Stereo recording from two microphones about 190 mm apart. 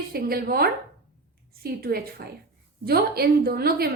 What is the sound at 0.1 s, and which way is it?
A woman's voice, 55° right (ahead or behind).